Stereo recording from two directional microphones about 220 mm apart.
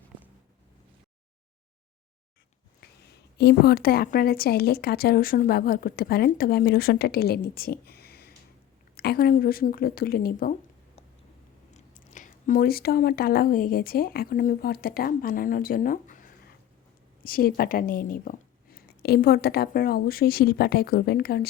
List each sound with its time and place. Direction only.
2.8 s a woman's voice: 50° left (ahead or behind)
11.7 s a woman's voice: 35° left (ahead or behind)